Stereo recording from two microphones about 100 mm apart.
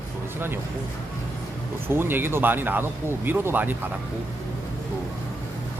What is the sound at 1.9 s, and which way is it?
Speech, 20° right (ahead or behind).